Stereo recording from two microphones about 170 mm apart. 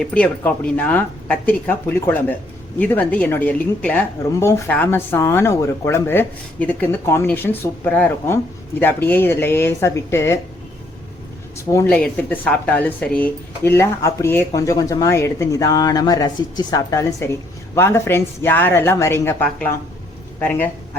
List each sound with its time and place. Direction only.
0.0 s a woman's voice: 10° left (ahead or behind)
11.5 s a woman's voice: 15° left (ahead or behind)
11.9 s a woman's voice: 5° left (ahead or behind)